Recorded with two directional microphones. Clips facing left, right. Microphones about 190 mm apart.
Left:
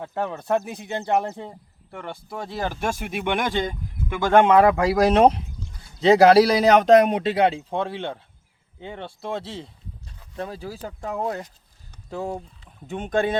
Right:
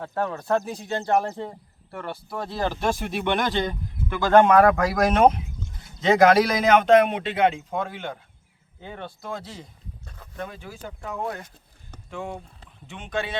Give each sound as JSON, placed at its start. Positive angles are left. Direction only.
{"t": 0.0, "sound": "speech", "side_deg": 20}
{"t": 12.9, "sound": "speech", "side_deg": 50}